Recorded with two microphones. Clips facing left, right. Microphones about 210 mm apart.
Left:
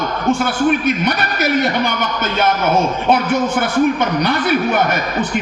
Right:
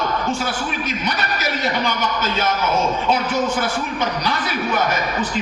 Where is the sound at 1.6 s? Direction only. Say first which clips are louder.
Left 4 dB; 60° left (ahead or behind).